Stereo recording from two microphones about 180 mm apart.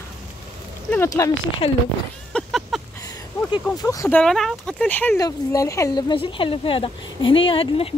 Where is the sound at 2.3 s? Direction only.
Centre (ahead or behind).